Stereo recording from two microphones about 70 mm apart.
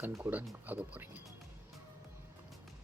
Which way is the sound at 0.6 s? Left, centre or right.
Right.